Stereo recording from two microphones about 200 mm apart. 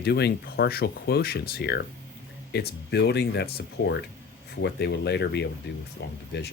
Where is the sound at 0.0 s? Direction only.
55° left (ahead or behind).